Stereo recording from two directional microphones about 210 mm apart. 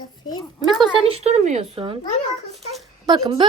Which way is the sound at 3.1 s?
20° right (ahead or behind).